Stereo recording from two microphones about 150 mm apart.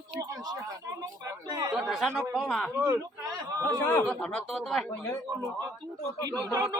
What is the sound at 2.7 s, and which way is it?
Speech, 15° right (ahead or behind).